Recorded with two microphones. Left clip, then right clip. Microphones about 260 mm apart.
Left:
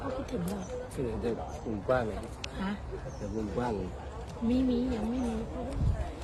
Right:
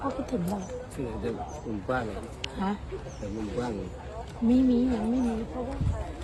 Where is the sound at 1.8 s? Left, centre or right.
Left.